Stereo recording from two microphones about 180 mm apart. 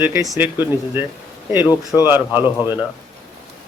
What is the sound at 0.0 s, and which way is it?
A man's voice, 15° right (ahead or behind).